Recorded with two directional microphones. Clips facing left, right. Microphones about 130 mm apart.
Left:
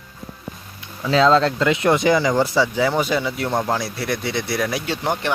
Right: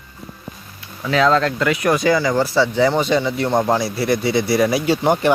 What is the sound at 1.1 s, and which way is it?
Speech, 25° left (ahead or behind).